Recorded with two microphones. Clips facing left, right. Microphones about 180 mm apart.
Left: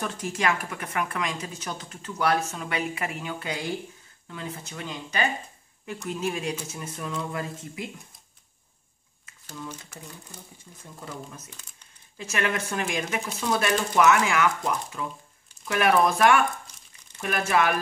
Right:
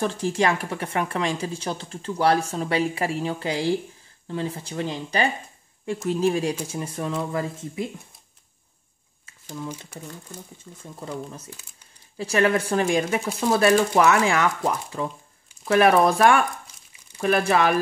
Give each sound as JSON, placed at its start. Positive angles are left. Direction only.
{"t": 0.0, "sound": "speech", "side_deg": -30}
{"t": 9.5, "sound": "speech", "side_deg": -10}
{"t": 10.6, "sound": "speech", "side_deg": -25}